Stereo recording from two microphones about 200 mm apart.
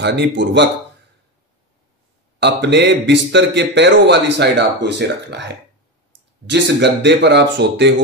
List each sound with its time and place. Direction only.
0.0 s speech: 60° right (ahead or behind)
2.4 s speech: 60° right (ahead or behind)